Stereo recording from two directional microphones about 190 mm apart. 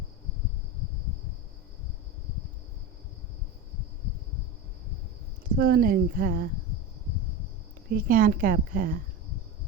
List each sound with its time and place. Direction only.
5.5 s a woman's voice: 50° right (ahead or behind)
7.9 s a woman's voice: 50° right (ahead or behind)